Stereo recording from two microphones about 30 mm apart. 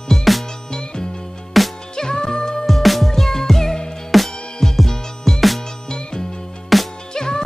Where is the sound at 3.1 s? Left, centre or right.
Centre.